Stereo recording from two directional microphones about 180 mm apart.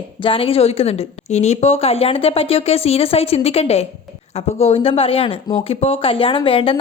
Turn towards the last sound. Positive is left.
turn(degrees=30)  # may be behind; listen again after turning